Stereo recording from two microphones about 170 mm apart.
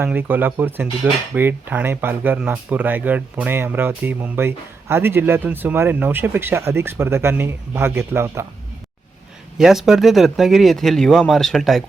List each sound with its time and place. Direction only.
0.0 s cutlery: 10° right (ahead or behind)
9.6 s speech: centre (ahead or behind)